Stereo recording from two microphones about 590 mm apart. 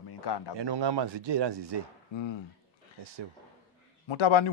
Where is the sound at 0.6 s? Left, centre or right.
Right.